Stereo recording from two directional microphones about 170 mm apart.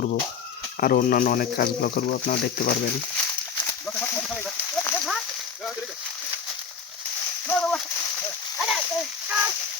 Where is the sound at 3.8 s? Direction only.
5° left (ahead or behind).